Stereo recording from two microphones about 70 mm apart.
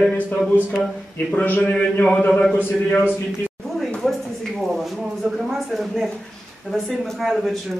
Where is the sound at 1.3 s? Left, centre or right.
Left.